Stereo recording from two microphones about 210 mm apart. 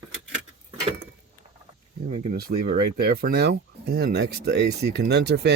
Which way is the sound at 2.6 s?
45° right (ahead or behind).